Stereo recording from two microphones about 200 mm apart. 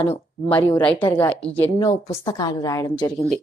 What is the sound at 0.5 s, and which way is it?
A woman's voice, 10° left (ahead or behind).